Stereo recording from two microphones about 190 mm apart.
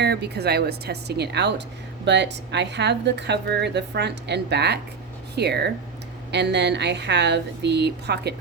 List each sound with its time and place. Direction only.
0.0 s a woman's voice: 60° right (ahead or behind)